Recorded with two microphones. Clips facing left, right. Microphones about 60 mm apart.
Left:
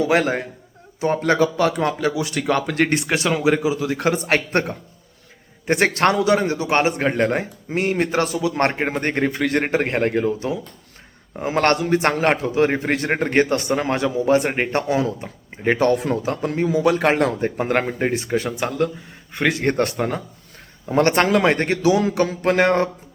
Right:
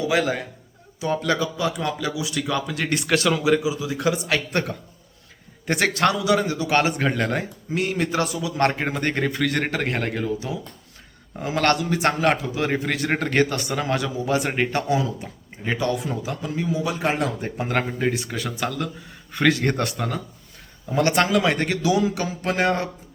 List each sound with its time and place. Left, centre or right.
0.0 s speech: left
1.7 s a man's voice: left
2.9 s a man's voice: left
15.6 s speech: left
16.6 s a man's voice: left
22.0 s a man's voice: left